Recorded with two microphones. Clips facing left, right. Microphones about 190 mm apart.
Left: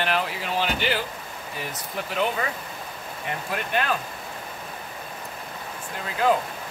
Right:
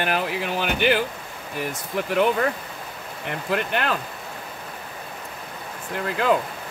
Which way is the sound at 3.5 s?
65° right (ahead or behind).